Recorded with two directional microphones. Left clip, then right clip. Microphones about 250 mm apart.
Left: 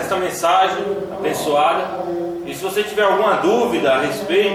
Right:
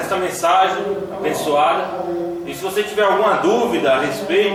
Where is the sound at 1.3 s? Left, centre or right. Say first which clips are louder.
Even; left.